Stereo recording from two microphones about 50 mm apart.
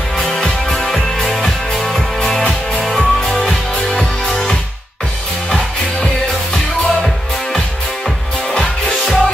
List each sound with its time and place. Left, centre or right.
0.2 s music: centre
8.5 s music: centre